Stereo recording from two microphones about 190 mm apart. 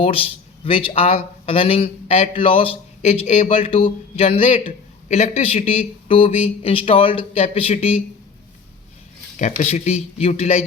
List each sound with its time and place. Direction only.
0.0 s speech: 30° left (ahead or behind)
9.6 s speech: 35° left (ahead or behind)